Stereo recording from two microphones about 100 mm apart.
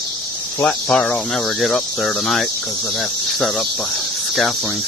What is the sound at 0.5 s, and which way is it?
Cricket, 15° left (ahead or behind).